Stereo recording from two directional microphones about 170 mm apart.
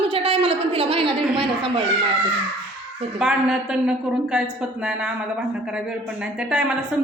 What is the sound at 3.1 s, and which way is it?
A woman's voice, 5° right (ahead or behind).